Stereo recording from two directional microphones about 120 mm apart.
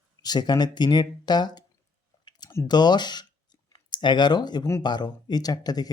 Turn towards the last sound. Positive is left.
turn(degrees=35)  # may be behind; listen again after turning